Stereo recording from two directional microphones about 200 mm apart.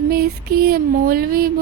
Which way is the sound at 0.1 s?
50° right (ahead or behind).